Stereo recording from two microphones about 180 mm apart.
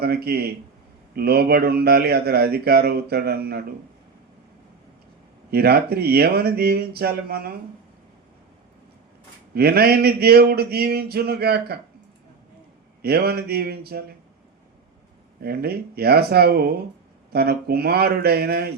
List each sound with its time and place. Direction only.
0.0 s a man's voice: 60° right (ahead or behind)
5.5 s a man's voice: 60° right (ahead or behind)
9.6 s a man's voice: 60° right (ahead or behind)
13.0 s a man's voice: 60° right (ahead or behind)
15.4 s a man's voice: 60° right (ahead or behind)